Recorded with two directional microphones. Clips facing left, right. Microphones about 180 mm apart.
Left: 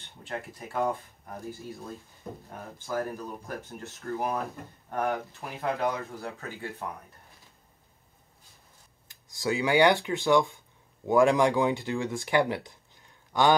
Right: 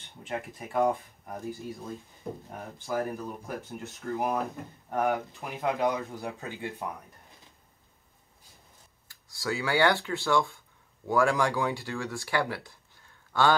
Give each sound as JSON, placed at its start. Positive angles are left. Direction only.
{"t": 0.7, "sound": "speech", "side_deg": -15}
{"t": 9.0, "sound": "speech", "side_deg": 20}